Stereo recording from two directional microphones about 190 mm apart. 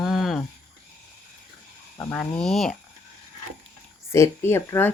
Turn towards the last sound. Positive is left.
turn(degrees=10)  # may be behind; listen again after turning